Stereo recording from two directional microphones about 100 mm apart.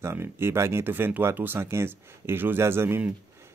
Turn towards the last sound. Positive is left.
turn(degrees=-20)  # may be behind; listen again after turning